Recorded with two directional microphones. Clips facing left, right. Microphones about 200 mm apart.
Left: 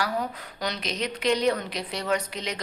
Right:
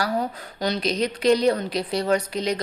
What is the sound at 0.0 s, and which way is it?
A woman's voice, 35° right (ahead or behind).